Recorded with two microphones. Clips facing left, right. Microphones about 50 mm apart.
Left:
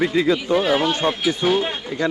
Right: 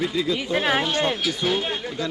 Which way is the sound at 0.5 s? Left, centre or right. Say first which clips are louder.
Left 3 dB; right.